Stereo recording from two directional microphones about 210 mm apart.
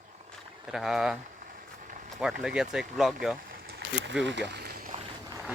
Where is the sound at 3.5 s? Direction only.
45° right (ahead or behind).